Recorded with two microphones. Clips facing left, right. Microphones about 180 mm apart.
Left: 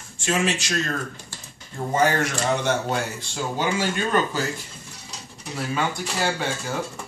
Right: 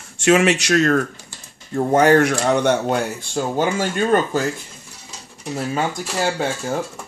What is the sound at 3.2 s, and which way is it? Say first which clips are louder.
Speech: right 6 dB; 50° right (ahead or behind).